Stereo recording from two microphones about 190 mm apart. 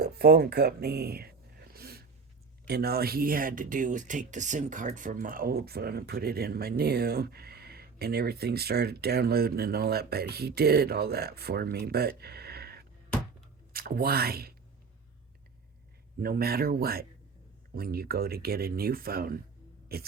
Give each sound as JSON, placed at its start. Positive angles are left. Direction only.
{"t": 0.0, "sound": "a sound", "side_deg": -55}
{"t": 2.6, "sound": "speech", "side_deg": -55}
{"t": 16.2, "sound": "speech", "side_deg": -50}